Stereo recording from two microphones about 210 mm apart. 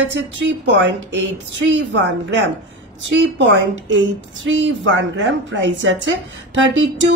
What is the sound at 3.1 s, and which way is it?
A woman's voice, 60° right (ahead or behind).